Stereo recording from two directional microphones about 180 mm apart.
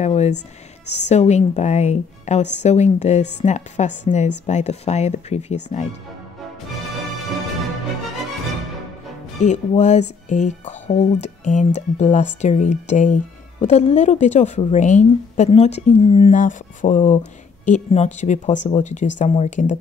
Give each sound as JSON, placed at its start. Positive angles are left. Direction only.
{"t": 0.0, "sound": "speech", "side_deg": 35}
{"t": 9.4, "sound": "speech", "side_deg": 40}